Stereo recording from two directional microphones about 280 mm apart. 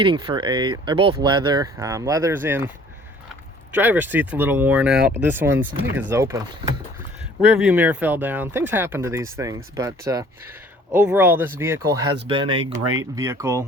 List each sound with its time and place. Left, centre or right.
0.0 s speech: centre
3.7 s speech: centre
12.8 s speech: right
13.1 s speech: centre